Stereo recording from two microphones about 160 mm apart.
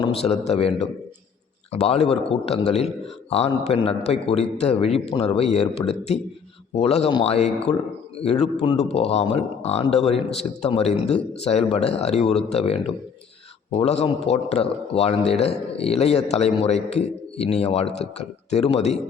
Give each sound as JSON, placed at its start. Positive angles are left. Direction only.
{"t": 0.0, "sound": "a man's voice", "side_deg": 40}